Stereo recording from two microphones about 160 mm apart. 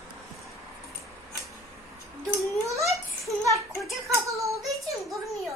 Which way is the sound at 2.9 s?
20° right (ahead or behind).